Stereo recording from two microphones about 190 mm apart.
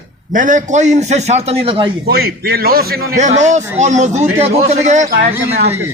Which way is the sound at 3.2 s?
40° right (ahead or behind).